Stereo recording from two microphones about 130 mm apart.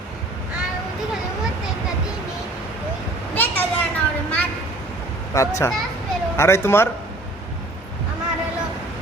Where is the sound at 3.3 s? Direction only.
15° left (ahead or behind).